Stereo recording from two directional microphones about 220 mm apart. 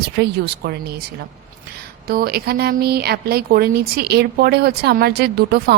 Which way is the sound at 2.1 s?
45° right (ahead or behind).